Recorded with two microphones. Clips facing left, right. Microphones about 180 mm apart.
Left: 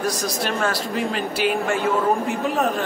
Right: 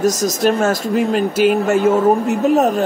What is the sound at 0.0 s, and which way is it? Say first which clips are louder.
Speech: right 9 dB; 45° right (ahead or behind).